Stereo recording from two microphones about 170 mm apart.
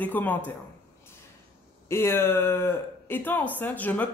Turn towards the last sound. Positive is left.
turn(degrees=10)  # may be behind; listen again after turning